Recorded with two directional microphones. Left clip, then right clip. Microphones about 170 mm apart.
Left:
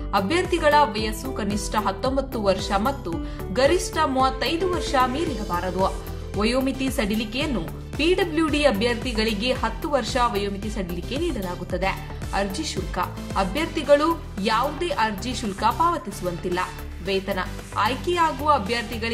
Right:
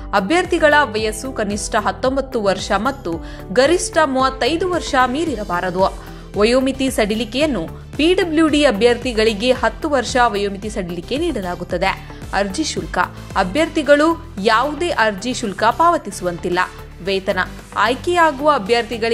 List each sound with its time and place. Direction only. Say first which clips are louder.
0.1 s a woman's voice: right 6 dB; 40° right (ahead or behind)